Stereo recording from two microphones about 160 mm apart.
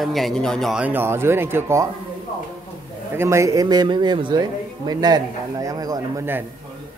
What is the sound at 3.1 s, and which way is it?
Speech, 20° right (ahead or behind).